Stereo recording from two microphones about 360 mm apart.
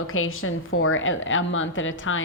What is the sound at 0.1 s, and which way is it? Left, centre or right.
A woman's voice, left.